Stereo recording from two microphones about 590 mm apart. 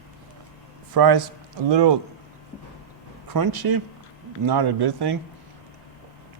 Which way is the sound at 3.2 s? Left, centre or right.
Right.